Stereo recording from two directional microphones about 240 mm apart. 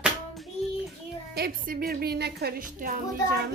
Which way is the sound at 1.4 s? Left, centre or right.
Right.